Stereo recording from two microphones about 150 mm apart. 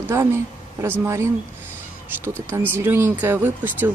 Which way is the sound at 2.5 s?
15° right (ahead or behind).